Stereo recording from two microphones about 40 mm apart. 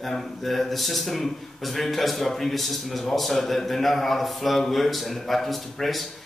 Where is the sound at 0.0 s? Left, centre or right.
Centre.